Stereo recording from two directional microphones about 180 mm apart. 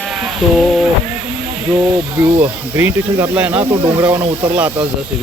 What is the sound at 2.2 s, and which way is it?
Speech, 10° right (ahead or behind).